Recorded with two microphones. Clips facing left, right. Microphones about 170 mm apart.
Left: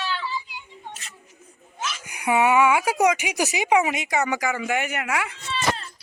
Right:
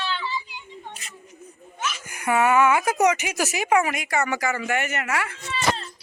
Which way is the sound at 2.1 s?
15° left (ahead or behind).